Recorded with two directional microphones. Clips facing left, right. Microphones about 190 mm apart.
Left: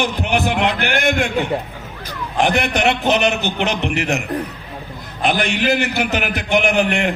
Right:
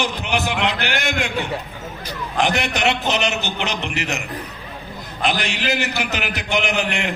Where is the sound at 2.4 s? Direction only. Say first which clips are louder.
Left 4 dB; 55° left (ahead or behind).